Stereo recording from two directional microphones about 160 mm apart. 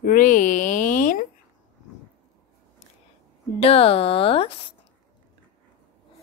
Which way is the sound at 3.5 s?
40° left (ahead or behind).